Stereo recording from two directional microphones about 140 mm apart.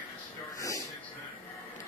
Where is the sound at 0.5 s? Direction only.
20° left (ahead or behind).